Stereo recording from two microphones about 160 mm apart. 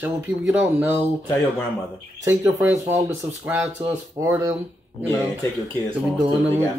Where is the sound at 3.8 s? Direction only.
20° right (ahead or behind).